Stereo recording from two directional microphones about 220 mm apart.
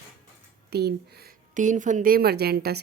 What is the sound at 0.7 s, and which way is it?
A woman's voice, 45° right (ahead or behind).